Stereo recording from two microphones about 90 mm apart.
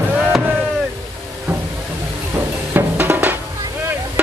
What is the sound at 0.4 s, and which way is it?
Chop, 25° right (ahead or behind).